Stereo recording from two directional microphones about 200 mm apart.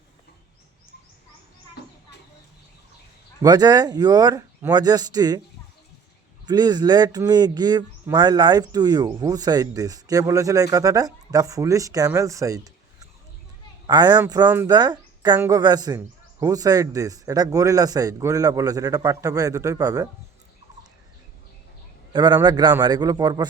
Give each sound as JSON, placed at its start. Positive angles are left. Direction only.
{"t": 3.4, "sound": "speech", "side_deg": -20}
{"t": 6.4, "sound": "speech", "side_deg": -20}
{"t": 22.1, "sound": "speech", "side_deg": -20}